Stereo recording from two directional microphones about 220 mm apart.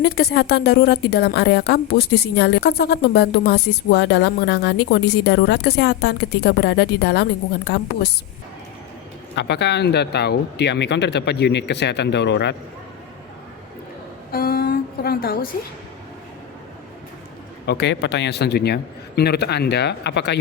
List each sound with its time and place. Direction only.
0.0 s a woman's voice: 45° left (ahead or behind)
9.3 s a woman's voice: 50° left (ahead or behind)
14.3 s a woman's voice: 40° left (ahead or behind)
17.7 s a woman's voice: 50° left (ahead or behind)